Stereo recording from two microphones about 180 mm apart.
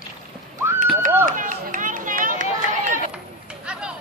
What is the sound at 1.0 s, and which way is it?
Run, 45° right (ahead or behind).